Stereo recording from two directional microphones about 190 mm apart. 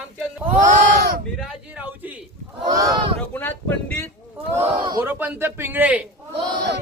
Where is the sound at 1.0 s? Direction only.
55° right (ahead or behind).